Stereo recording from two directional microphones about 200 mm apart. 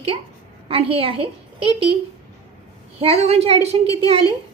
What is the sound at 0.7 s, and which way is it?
A woman's voice, 30° right (ahead or behind).